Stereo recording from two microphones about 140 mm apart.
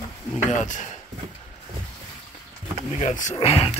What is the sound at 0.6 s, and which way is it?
Speech, 60° left (ahead or behind).